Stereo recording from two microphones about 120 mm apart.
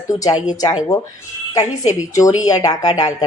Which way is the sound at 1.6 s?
30° left (ahead or behind).